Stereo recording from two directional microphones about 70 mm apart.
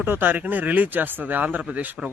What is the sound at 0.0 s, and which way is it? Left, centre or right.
A man's voice, right.